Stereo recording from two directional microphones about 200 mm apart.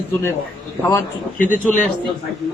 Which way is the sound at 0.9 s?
15° left (ahead or behind).